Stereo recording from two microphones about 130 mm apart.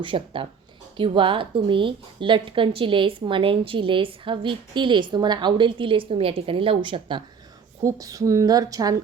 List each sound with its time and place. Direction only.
0.0 s a woman's voice: 40° right (ahead or behind)
7.9 s speech: 25° right (ahead or behind)